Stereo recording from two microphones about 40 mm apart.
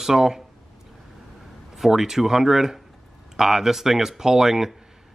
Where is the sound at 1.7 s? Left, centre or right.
Centre.